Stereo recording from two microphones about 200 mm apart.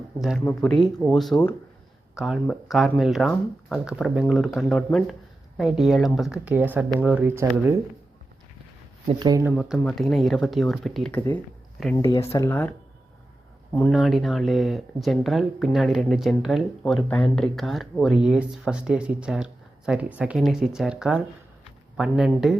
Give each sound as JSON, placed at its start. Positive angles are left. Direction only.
{"t": 0.2, "sound": "speech", "side_deg": 0}
{"t": 9.0, "sound": "speech", "side_deg": -20}
{"t": 9.5, "sound": "speech", "side_deg": 0}
{"t": 11.9, "sound": "speech", "side_deg": 15}
{"t": 13.7, "sound": "speech", "side_deg": 0}